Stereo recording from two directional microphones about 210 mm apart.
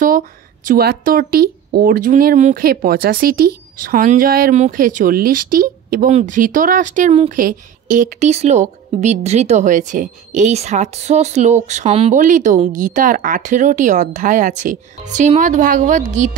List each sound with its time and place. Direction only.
0.7 s speech: 45° right (ahead or behind)